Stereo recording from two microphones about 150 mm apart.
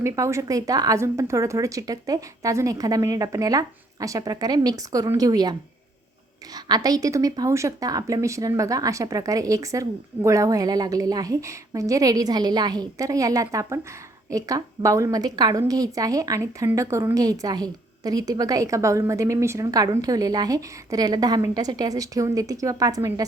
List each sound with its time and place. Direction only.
0.0 s a woman's voice: 20° right (ahead or behind)
6.7 s a woman's voice: 25° right (ahead or behind)